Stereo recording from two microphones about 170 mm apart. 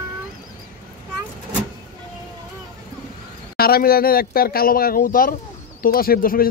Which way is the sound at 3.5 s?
60° left (ahead or behind).